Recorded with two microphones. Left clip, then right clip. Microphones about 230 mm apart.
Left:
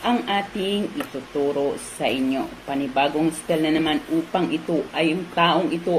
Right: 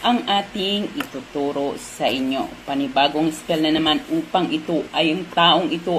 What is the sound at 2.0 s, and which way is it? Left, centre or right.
Speech, right.